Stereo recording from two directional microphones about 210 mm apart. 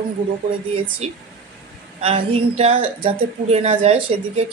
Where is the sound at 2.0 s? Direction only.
25° right (ahead or behind).